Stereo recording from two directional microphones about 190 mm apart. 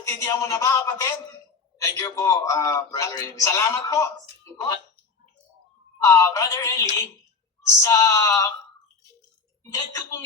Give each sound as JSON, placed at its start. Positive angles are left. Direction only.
{"t": 0.0, "sound": "a man's voice", "side_deg": 15}
{"t": 6.1, "sound": "a man's voice", "side_deg": 15}
{"t": 9.7, "sound": "a man's voice", "side_deg": 15}